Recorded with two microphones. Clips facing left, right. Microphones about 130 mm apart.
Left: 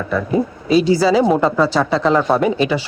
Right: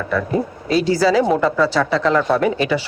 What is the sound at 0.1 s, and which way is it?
A woman's voice, 15° left (ahead or behind).